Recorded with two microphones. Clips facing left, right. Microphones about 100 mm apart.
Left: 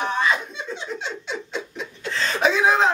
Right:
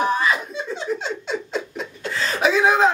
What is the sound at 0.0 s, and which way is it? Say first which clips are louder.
Chuckle: right 2 dB; 5° right (ahead or behind).